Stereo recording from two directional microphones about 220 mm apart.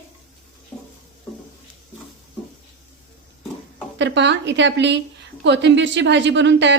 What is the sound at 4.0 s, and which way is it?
A woman's voice, 55° right (ahead or behind).